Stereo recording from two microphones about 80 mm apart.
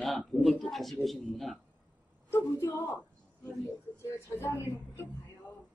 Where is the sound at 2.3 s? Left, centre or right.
Left.